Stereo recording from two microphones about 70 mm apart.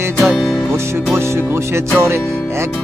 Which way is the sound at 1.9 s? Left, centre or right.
Right.